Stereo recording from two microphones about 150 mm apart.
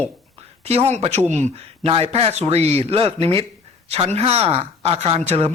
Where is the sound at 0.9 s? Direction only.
45° right (ahead or behind).